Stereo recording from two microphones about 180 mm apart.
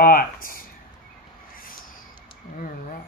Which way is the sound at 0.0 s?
50° left (ahead or behind).